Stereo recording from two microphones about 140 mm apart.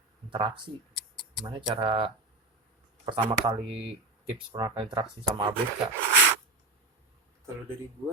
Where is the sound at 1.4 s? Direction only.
35° right (ahead or behind).